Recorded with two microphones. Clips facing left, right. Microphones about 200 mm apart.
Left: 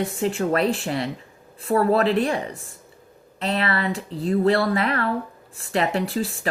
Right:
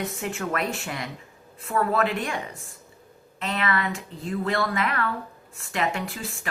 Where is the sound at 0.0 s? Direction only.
30° left (ahead or behind).